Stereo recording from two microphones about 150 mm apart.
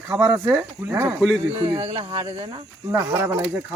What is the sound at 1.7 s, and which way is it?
Speech, 40° right (ahead or behind).